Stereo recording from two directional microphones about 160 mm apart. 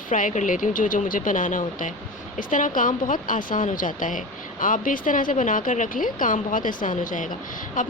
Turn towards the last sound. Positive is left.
turn(degrees=55)  # may be behind; listen again after turning